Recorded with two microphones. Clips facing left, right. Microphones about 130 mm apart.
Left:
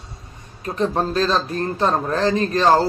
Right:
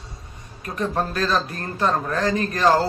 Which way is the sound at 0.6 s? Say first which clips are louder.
Left 4 dB; 30° left (ahead or behind).